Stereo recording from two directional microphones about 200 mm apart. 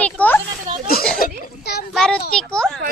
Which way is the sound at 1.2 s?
55° left (ahead or behind).